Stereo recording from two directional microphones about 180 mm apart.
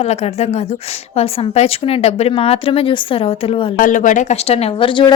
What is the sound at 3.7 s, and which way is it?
Speech, 50° left (ahead or behind).